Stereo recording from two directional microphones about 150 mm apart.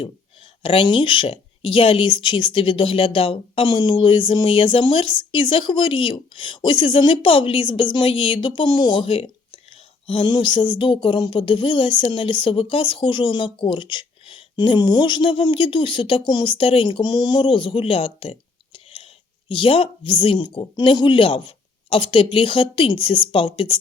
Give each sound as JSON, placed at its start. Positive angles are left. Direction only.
{"t": 0.6, "sound": "speech", "side_deg": 35}